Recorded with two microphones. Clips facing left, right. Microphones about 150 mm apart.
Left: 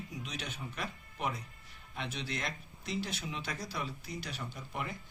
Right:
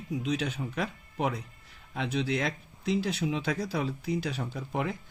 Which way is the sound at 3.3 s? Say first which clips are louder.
Right 10 dB; 90° right.